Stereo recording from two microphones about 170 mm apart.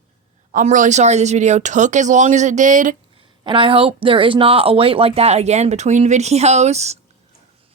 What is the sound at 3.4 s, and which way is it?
Speech, 30° right (ahead or behind).